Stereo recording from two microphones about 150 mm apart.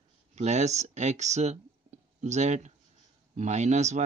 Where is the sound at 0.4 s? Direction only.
50° right (ahead or behind).